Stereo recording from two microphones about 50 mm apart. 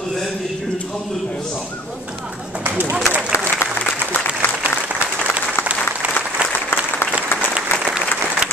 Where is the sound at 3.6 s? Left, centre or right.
Left.